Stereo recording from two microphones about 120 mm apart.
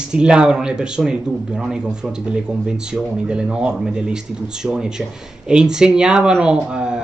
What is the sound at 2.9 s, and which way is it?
Speech, 10° right (ahead or behind).